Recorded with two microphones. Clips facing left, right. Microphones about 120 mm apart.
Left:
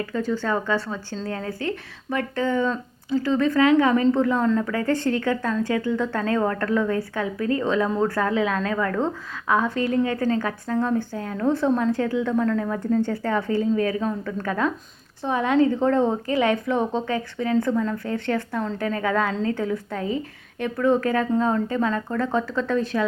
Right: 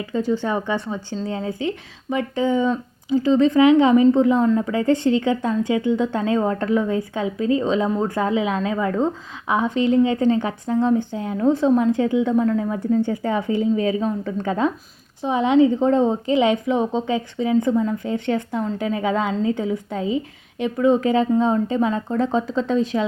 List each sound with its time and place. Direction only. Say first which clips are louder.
0.0 s a woman's voice: right 3 dB; 20° right (ahead or behind)